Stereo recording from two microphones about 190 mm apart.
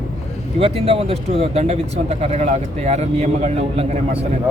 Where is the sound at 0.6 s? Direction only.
30° right (ahead or behind).